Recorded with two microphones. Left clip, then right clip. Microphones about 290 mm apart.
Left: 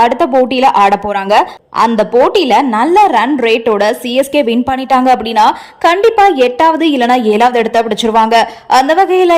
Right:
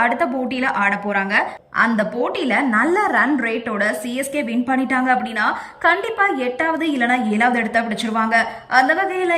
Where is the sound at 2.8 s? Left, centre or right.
Centre.